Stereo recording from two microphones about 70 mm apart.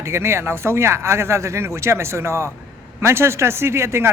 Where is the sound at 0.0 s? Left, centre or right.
Right.